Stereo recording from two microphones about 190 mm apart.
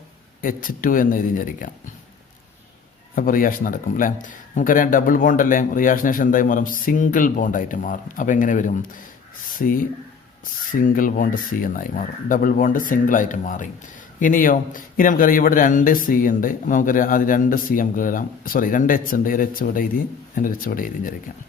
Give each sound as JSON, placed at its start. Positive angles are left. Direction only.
{"t": 0.4, "sound": "a man's voice", "side_deg": 45}
{"t": 3.2, "sound": "a man's voice", "side_deg": 45}